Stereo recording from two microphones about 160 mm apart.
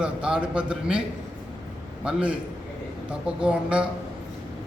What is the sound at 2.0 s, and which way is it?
A man's voice, 5° right (ahead or behind).